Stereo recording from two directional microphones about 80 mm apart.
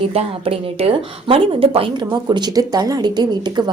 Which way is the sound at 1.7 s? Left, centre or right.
Right.